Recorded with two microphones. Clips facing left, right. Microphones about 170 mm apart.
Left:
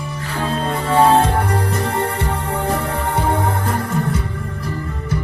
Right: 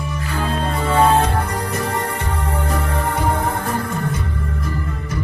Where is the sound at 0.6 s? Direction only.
30° left (ahead or behind).